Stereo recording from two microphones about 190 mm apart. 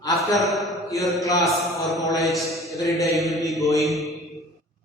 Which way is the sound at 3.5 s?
15° left (ahead or behind).